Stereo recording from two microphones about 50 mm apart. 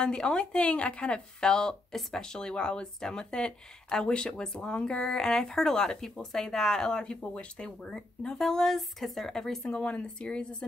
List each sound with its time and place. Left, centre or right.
0.0 s speech: centre
2.2 s speech: centre
9.8 s speech: left